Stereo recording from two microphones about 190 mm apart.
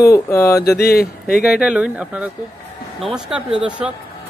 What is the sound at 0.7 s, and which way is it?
Speech, 55° left (ahead or behind).